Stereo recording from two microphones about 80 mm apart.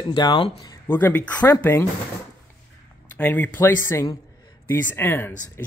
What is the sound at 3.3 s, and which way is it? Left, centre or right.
Speech, left.